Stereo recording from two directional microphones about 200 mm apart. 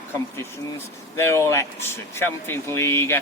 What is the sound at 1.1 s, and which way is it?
Speech, 15° left (ahead or behind).